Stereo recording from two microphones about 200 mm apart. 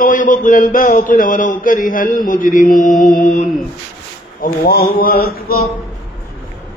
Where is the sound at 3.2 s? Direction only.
35° left (ahead or behind).